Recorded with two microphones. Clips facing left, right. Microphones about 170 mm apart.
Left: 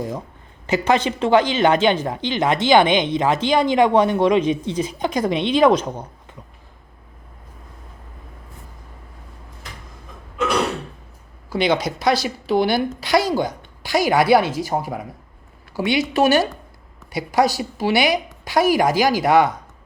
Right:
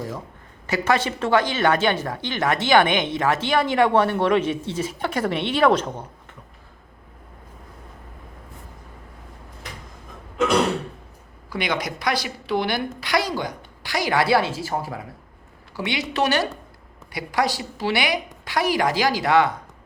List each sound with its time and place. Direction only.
0.7 s speech: 20° left (ahead or behind)
11.4 s a woman's voice: 25° left (ahead or behind)
13.4 s a sound: 25° left (ahead or behind)
14.1 s a woman's voice: 20° left (ahead or behind)